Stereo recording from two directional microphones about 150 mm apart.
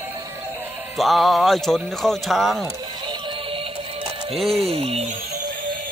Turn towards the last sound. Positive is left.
turn(degrees=-40)  # may be behind; listen again after turning